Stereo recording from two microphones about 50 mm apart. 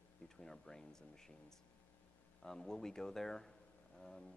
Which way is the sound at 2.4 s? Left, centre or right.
Centre.